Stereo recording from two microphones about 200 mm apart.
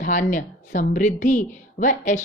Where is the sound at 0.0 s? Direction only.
40° left (ahead or behind).